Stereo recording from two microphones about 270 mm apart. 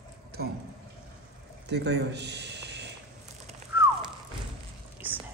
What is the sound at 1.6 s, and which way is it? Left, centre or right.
A man's voice, right.